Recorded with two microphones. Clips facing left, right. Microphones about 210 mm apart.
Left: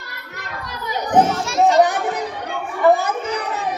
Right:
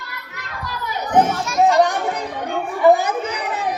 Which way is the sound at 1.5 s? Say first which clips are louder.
Even; 25° left (ahead or behind).